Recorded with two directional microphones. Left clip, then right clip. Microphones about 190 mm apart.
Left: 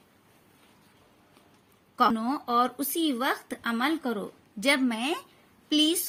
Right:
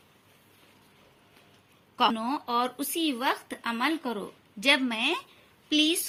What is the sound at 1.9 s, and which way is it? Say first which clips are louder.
A woman's voice: left 1 dB; 45° left (ahead or behind).